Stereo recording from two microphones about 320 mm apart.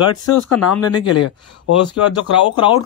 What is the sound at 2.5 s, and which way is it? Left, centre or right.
Speech, centre.